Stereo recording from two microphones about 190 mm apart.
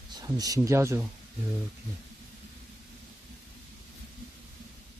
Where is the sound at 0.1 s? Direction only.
20° right (ahead or behind).